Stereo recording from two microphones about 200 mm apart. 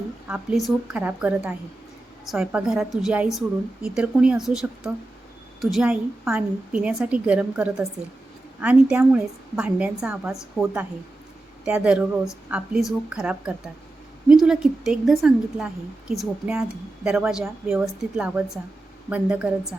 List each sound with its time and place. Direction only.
0.3 s a woman's voice: 5° right (ahead or behind)